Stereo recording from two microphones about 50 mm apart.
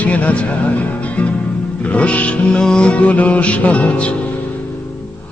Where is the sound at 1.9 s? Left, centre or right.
Left.